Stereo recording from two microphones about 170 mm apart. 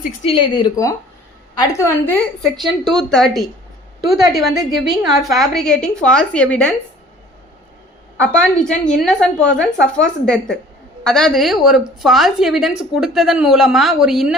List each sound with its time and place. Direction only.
0.3 s a woman's voice: 30° left (ahead or behind); by 2.5 s 10° left (ahead or behind)
2.6 s a woman's voice: centre (ahead or behind)
8.3 s a woman's voice: 5° left (ahead or behind)